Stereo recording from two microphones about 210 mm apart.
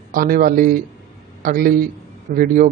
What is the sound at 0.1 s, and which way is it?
A man's voice, 40° right (ahead or behind).